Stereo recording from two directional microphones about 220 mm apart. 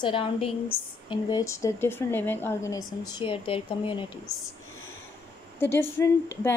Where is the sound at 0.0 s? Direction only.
25° left (ahead or behind).